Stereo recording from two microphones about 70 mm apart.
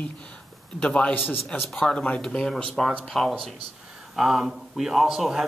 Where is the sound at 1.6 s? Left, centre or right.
Centre.